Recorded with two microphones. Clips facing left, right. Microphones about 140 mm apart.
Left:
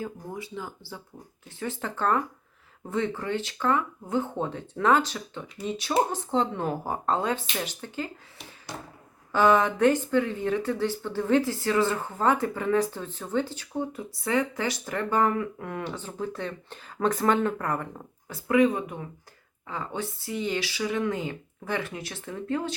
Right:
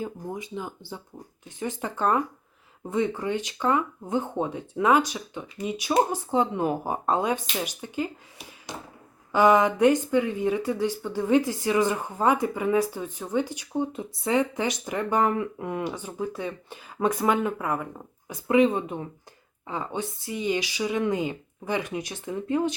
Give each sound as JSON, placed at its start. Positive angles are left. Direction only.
{"t": 0.0, "sound": "speech", "side_deg": -20}
{"t": 18.3, "sound": "speech", "side_deg": -20}